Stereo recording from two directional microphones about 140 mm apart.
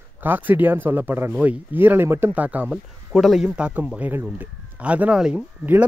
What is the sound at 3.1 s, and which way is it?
A man's voice, centre (ahead or behind).